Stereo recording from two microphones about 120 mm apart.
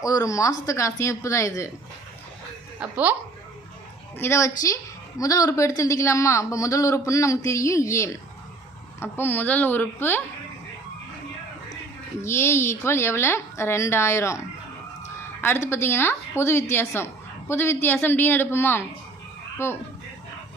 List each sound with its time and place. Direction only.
0.0 s a woman's voice: 30° left (ahead or behind)
2.8 s speech: 15° right (ahead or behind)
4.2 s a woman's voice: 25° left (ahead or behind)
12.2 s a woman's voice: 20° left (ahead or behind)